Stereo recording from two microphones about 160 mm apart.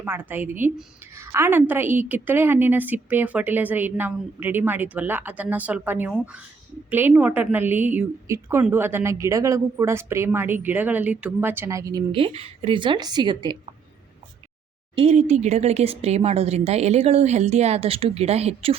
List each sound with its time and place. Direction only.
0.0 s a woman's voice: 10° right (ahead or behind); by 13.6 s 30° right (ahead or behind)
14.9 s speech: 40° right (ahead or behind)